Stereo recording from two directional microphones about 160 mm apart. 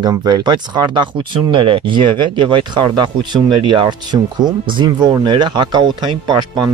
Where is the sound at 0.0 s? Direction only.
25° right (ahead or behind).